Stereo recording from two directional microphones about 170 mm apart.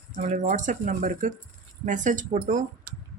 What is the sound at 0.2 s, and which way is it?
Speech, 45° right (ahead or behind).